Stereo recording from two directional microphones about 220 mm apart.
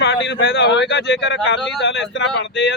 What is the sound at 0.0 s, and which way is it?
Speech, 55° left (ahead or behind).